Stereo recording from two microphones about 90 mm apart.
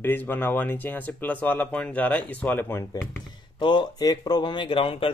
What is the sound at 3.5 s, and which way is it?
Speech, 60° left (ahead or behind).